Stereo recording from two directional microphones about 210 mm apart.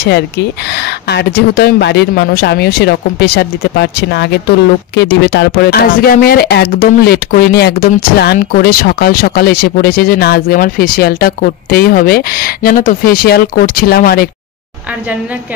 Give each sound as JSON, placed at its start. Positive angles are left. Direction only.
{"t": 0.0, "sound": "speech", "side_deg": 50}